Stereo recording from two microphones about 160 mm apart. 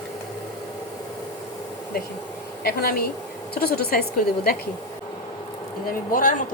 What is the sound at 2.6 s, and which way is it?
A woman's voice, 70° left (ahead or behind).